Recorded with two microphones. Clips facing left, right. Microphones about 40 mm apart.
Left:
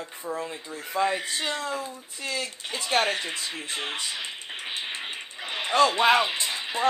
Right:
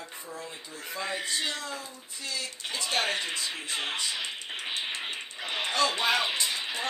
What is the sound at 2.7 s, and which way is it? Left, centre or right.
Speech, centre.